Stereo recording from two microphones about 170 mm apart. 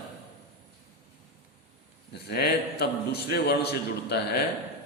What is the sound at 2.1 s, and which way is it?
A man's voice, 70° left (ahead or behind).